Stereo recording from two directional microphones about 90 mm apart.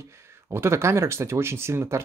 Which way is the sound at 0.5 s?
30° right (ahead or behind).